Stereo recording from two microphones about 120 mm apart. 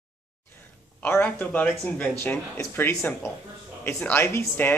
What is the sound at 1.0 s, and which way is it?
Speech, 15° left (ahead or behind).